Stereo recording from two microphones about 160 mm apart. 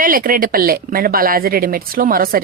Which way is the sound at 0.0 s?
60° right (ahead or behind).